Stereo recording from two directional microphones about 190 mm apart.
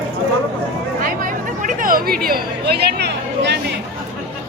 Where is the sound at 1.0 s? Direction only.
45° right (ahead or behind).